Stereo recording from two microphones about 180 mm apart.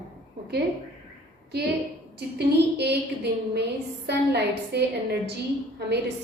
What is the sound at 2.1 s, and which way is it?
A woman's voice, 65° right (ahead or behind).